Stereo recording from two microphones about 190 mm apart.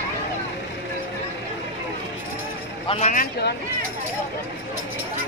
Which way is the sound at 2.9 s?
40° left (ahead or behind).